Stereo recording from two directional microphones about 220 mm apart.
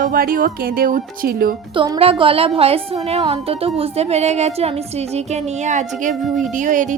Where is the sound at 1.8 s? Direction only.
25° right (ahead or behind).